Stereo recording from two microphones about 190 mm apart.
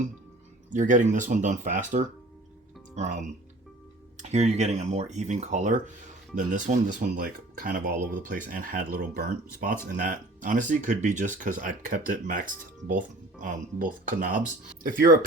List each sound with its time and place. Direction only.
0.7 s speech: 40° right (ahead or behind)